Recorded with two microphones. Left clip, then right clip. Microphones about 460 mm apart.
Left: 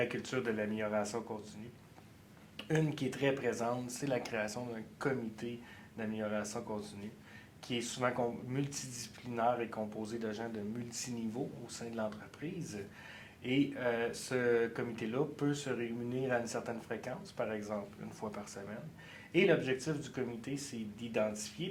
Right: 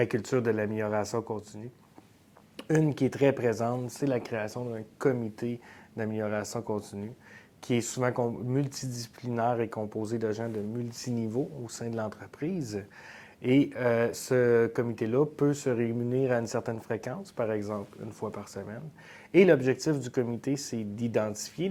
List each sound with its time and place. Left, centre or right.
0.0 s speech: right
2.6 s speech: right
11.6 s speech: right
19.3 s speech: right